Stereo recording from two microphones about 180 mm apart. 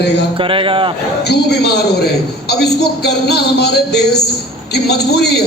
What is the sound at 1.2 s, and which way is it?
A man's voice, 65° left (ahead or behind).